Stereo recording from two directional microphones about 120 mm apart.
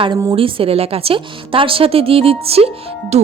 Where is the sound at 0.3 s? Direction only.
50° right (ahead or behind).